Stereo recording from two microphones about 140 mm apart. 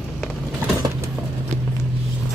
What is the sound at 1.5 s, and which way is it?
Vehicle, 55° right (ahead or behind).